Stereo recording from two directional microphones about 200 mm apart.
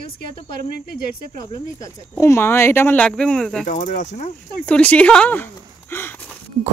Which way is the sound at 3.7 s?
40° left (ahead or behind).